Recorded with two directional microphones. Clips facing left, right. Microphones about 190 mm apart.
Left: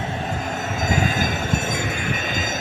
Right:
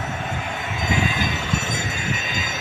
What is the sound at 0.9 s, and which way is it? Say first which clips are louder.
Train: left 1 dB; 45° left (ahead or behind).